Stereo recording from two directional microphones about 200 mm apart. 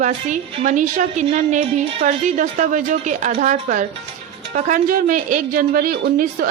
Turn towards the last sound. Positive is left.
turn(degrees=-45)  # may be behind; listen again after turning